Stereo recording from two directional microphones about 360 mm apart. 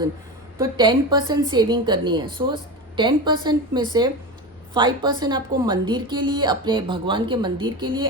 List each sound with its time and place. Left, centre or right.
0.6 s a woman's voice: centre